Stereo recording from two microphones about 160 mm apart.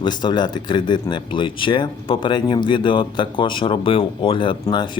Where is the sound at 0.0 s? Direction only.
25° left (ahead or behind).